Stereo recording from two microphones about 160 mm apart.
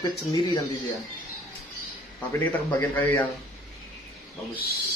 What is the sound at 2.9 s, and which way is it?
Speech, 10° left (ahead or behind).